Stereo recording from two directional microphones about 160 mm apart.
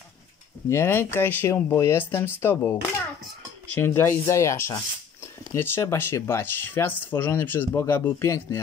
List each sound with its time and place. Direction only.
0.7 s speech: 15° left (ahead or behind)
3.8 s speech: 15° left (ahead or behind)